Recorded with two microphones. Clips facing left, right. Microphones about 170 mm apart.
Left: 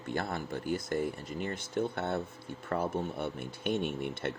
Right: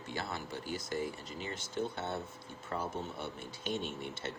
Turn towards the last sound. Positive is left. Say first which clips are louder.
# left 6 dB
turn(degrees=55)  # may be behind; listen again after turning